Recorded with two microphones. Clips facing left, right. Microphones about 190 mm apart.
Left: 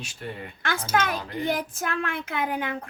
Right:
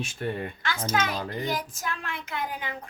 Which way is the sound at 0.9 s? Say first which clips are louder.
Left 3 dB; 55° left (ahead or behind).